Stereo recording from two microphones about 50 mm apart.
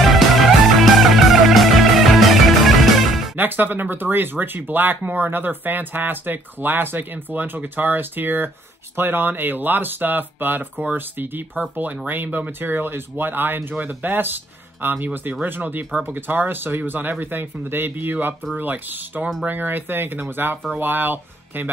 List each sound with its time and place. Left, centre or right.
0.0 s music: centre
3.3 s speech: right